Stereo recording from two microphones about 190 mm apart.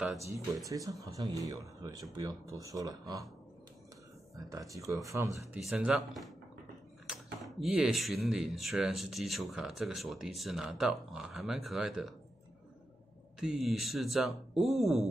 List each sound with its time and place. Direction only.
0.7 s speech: 15° right (ahead or behind)
4.5 s speech: 15° right (ahead or behind)
5.6 s speech: 5° right (ahead or behind)
13.4 s speech: centre (ahead or behind)